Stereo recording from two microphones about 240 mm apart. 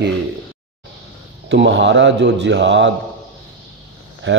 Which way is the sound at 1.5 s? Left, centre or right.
Right.